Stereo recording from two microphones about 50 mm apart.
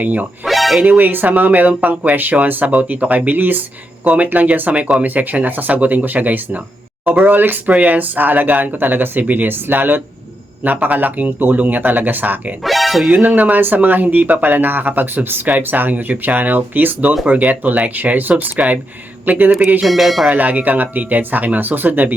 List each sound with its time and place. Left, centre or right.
0.0 s speech: right
0.4 s a sound: centre
0.9 s speech: right
12.6 s music: centre
13.1 s a man's voice: right
19.8 s speech: centre
20.3 s speech: right